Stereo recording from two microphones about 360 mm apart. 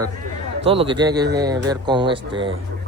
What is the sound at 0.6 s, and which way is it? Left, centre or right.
Speech, centre.